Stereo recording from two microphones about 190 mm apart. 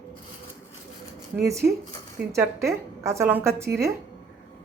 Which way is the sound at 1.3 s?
15° right (ahead or behind).